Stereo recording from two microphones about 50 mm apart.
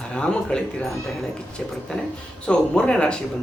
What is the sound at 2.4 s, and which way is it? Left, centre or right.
Speech, centre.